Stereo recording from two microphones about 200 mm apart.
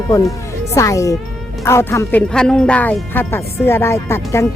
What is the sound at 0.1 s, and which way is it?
Speech, 15° left (ahead or behind).